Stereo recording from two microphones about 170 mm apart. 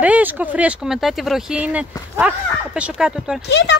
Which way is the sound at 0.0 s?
10° right (ahead or behind).